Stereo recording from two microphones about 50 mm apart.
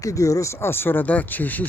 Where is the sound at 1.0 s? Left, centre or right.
Left.